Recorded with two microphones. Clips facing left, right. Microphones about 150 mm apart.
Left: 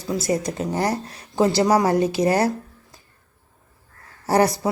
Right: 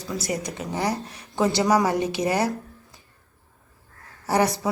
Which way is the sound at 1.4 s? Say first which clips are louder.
Left 3 dB; 30° left (ahead or behind).